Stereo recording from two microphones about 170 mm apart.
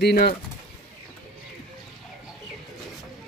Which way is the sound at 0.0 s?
65° left (ahead or behind).